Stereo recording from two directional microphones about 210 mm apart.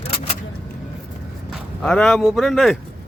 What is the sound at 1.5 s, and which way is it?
Speech, 5° left (ahead or behind).